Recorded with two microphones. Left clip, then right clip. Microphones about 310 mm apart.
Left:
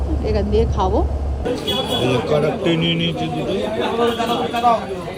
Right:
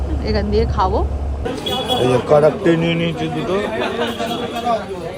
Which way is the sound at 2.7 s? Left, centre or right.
Centre.